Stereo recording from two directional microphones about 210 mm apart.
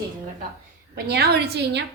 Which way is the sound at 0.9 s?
50° right (ahead or behind).